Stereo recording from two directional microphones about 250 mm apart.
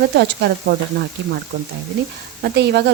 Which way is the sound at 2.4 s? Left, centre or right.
Right.